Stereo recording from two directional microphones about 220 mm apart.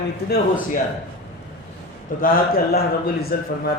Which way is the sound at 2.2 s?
40° left (ahead or behind).